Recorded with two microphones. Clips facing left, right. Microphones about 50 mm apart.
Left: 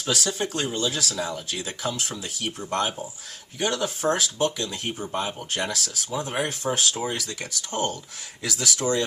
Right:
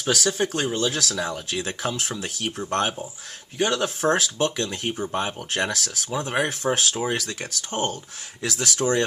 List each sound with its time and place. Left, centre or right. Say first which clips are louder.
0.0 s speech: right 3 dB; right